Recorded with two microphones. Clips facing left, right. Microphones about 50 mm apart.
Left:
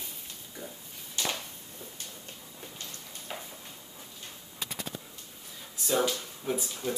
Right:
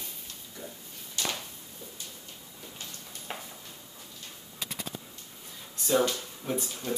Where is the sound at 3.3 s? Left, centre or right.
Right.